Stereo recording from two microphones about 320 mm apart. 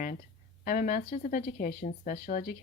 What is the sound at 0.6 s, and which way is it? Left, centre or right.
Speech, left.